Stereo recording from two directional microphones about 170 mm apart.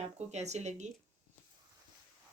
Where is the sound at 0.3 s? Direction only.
40° right (ahead or behind).